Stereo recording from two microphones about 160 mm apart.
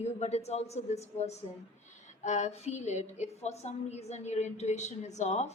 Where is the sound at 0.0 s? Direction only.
45° left (ahead or behind).